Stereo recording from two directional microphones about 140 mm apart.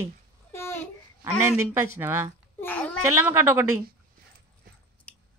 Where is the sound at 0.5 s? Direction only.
20° left (ahead or behind).